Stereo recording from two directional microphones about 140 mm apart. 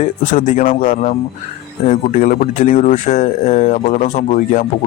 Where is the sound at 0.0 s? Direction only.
60° left (ahead or behind).